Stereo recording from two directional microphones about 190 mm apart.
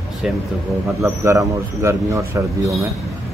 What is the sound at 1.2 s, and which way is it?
Speech, 15° right (ahead or behind).